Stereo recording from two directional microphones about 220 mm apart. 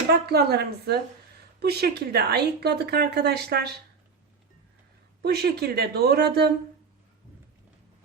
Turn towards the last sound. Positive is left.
turn(degrees=-45)  # may be behind; listen again after turning